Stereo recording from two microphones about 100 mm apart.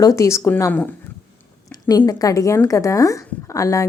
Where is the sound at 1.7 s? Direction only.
40° left (ahead or behind).